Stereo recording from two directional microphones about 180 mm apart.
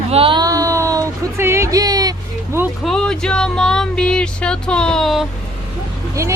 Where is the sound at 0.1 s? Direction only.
30° right (ahead or behind).